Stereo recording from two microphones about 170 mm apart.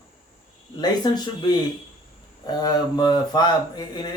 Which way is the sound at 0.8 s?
25° left (ahead or behind).